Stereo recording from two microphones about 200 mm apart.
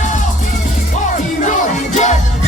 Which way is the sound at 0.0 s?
40° left (ahead or behind).